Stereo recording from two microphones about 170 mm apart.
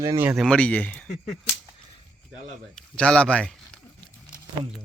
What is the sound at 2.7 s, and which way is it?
Speech, 5° left (ahead or behind).